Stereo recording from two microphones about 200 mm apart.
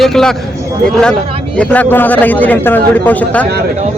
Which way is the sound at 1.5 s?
10° left (ahead or behind).